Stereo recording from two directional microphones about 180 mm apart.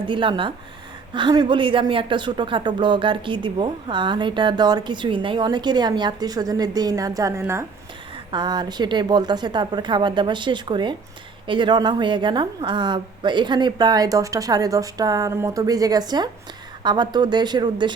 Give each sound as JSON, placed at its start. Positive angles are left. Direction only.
{"t": 0.1, "sound": "speech", "side_deg": -25}